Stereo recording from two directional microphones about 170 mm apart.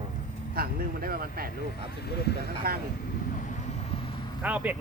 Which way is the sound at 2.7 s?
60° right (ahead or behind).